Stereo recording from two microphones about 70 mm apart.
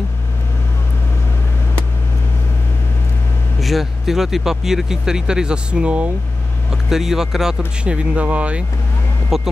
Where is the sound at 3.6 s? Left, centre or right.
Centre.